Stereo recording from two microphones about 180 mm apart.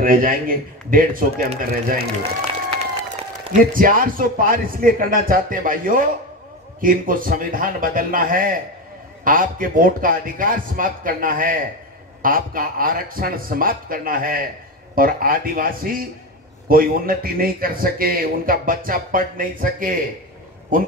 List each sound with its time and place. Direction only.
0.0 s a man's voice: 50° right (ahead or behind)
3.5 s a man's voice: 50° right (ahead or behind)